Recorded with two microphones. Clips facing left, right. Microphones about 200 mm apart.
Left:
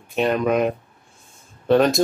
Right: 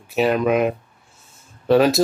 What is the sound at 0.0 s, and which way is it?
Speech, 5° right (ahead or behind).